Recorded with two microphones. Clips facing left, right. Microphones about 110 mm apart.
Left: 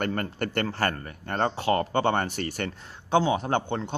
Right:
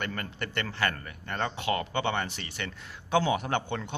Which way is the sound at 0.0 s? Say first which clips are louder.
Left 7 dB; 45° left (ahead or behind).